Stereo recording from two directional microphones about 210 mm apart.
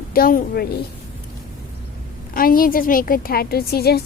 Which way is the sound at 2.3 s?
40° left (ahead or behind).